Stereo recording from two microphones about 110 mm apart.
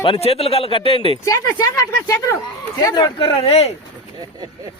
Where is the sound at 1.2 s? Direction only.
30° left (ahead or behind); by 3.7 s 60° left (ahead or behind).